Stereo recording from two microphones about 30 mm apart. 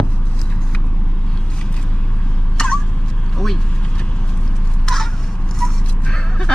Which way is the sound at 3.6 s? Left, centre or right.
Left.